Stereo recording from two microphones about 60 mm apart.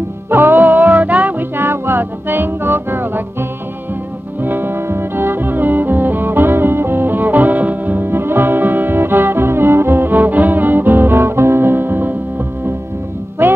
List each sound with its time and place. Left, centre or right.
0.3 s music: right
1.6 s music: right
13.4 s music: right